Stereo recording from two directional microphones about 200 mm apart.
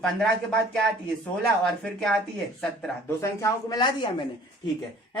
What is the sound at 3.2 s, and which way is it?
A woman's voice, 15° left (ahead or behind).